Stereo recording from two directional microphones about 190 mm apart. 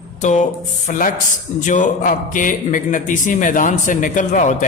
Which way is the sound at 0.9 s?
45° left (ahead or behind).